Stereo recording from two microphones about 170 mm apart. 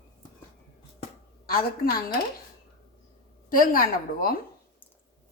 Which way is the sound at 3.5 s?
55° left (ahead or behind).